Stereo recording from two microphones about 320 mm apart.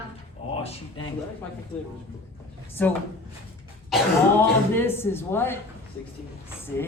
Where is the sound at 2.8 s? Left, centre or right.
Centre.